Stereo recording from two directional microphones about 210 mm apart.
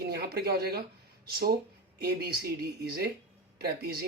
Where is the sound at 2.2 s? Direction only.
50° right (ahead or behind).